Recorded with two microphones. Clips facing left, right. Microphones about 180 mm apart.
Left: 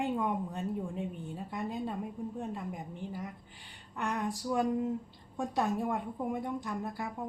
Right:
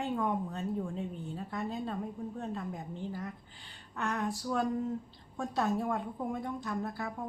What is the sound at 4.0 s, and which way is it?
A woman's voice, 15° left (ahead or behind).